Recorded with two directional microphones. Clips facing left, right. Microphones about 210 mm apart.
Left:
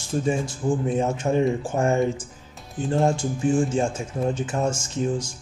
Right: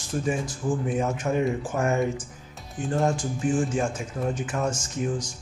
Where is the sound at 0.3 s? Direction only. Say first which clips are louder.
Left 3 dB; 25° left (ahead or behind).